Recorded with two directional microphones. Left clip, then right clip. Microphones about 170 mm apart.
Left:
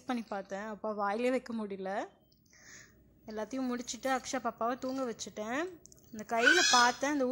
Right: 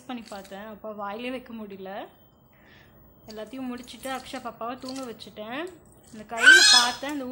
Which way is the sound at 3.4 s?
45° left (ahead or behind).